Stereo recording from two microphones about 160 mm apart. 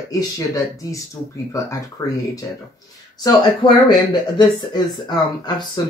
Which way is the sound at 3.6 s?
25° left (ahead or behind).